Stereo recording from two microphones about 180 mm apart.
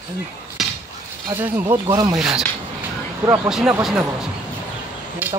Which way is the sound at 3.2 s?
15° right (ahead or behind).